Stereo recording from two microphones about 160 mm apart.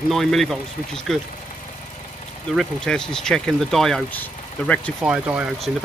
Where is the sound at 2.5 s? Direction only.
5° left (ahead or behind).